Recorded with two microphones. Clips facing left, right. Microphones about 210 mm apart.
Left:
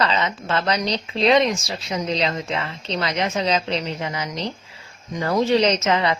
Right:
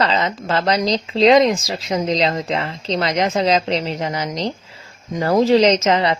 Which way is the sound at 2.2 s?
35° right (ahead or behind).